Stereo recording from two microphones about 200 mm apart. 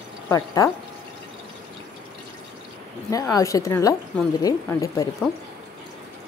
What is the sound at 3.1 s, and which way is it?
A woman's voice, 15° left (ahead or behind).